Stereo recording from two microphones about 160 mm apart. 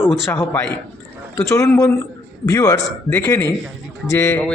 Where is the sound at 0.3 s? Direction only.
15° left (ahead or behind).